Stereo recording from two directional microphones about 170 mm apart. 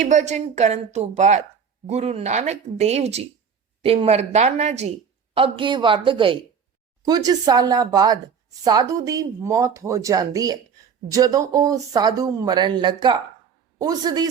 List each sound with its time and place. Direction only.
0.0 s a woman's voice: 45° right (ahead or behind); by 14.3 s 25° right (ahead or behind)